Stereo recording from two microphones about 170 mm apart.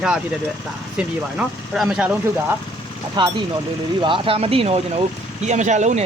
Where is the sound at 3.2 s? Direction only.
25° right (ahead or behind).